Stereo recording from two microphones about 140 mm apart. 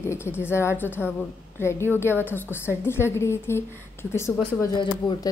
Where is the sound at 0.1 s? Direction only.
15° left (ahead or behind).